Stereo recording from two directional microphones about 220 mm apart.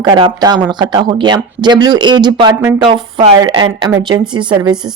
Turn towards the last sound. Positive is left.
turn(degrees=-20)  # may be behind; listen again after turning